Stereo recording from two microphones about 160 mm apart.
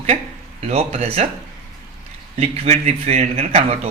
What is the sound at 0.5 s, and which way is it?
Speech, 40° right (ahead or behind).